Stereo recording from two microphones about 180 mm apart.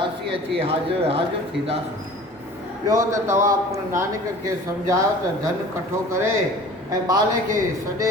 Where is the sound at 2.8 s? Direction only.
15° right (ahead or behind).